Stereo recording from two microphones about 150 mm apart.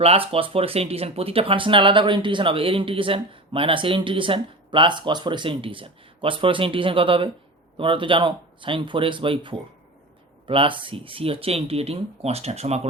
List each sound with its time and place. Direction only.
0.0 s speech: 40° right (ahead or behind)